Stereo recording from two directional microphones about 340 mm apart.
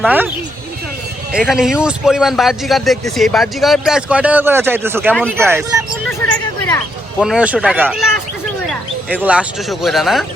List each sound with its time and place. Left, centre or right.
0.0 s speech: centre
1.3 s speech: centre
7.2 s speech: centre